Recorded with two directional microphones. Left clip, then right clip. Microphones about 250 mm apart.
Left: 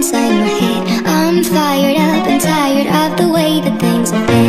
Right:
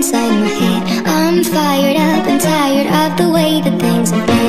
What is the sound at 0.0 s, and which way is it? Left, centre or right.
Music, centre.